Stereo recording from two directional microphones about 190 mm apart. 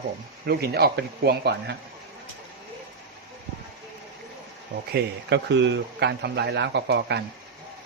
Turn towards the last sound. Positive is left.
turn(degrees=-60)  # may be behind; listen again after turning